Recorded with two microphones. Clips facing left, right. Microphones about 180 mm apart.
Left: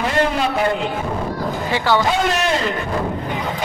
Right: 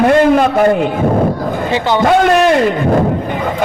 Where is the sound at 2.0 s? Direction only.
55° right (ahead or behind).